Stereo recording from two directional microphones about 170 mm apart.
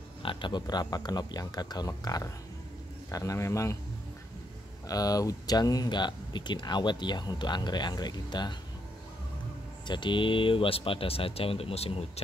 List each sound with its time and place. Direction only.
0.2 s speech: 30° left (ahead or behind)
4.8 s speech: 20° left (ahead or behind)
9.8 s speech: 30° left (ahead or behind)